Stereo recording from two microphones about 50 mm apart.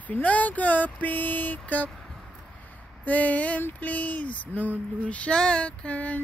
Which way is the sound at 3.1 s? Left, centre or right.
Left.